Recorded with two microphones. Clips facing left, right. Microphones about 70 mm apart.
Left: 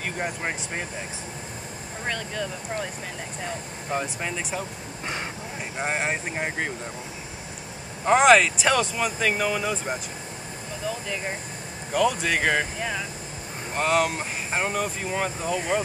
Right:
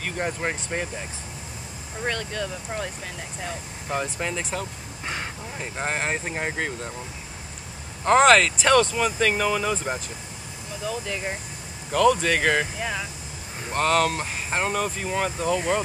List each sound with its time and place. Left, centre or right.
0.0 s speech: centre
2.0 s speech: centre
3.9 s speech: centre
8.0 s speech: centre